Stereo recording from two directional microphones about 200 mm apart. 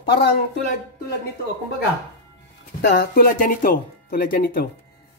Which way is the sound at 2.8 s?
55° left (ahead or behind).